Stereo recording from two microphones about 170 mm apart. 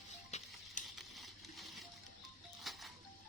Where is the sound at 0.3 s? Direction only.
40° left (ahead or behind).